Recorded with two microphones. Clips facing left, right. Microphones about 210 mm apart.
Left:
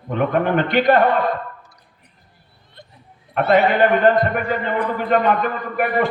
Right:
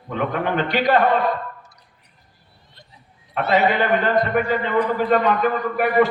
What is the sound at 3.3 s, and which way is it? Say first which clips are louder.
A man's voice: left 3 dB; 55° left (ahead or behind).